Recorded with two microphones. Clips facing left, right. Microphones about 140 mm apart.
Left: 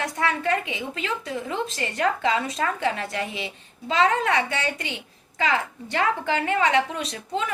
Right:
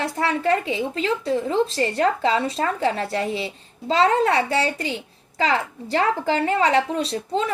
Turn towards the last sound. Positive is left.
turn(degrees=-35)  # may be behind; listen again after turning